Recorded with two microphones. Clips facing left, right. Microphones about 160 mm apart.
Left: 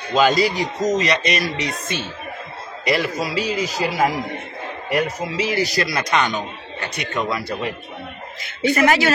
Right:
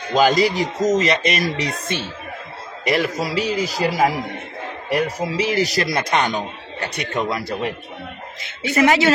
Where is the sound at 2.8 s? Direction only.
40° right (ahead or behind).